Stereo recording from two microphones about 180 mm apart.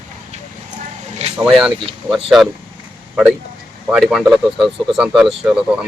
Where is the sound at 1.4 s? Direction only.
5° right (ahead or behind).